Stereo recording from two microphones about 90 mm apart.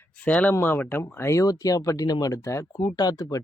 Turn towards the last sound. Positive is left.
turn(degrees=45)  # may be behind; listen again after turning